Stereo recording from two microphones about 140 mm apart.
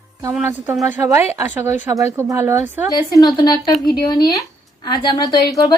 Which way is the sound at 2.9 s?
30° left (ahead or behind).